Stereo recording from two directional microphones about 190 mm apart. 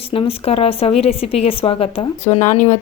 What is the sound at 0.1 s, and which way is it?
A woman's voice, 30° left (ahead or behind).